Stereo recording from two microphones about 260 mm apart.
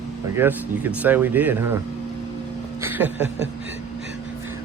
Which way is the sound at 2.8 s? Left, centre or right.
Centre.